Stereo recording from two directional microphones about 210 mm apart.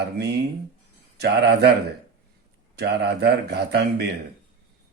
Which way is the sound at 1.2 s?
55° right (ahead or behind).